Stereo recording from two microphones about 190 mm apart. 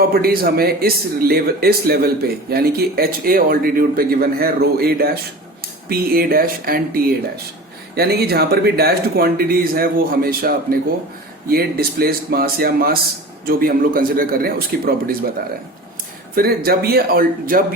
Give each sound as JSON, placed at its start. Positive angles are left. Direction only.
{"t": 0.1, "sound": "speech", "side_deg": -55}
{"t": 16.3, "sound": "speech", "side_deg": -55}